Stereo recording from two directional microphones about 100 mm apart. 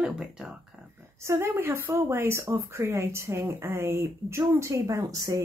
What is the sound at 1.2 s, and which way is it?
Speech, 25° right (ahead or behind).